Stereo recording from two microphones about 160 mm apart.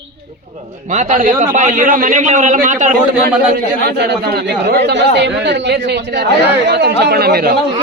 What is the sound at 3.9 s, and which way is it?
Speech, 85° right.